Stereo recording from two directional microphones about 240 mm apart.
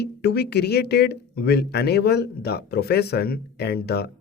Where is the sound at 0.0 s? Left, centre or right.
Left.